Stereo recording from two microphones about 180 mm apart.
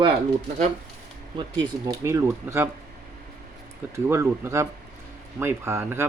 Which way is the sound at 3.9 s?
15° right (ahead or behind).